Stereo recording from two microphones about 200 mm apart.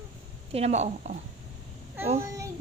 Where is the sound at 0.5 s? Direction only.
35° right (ahead or behind).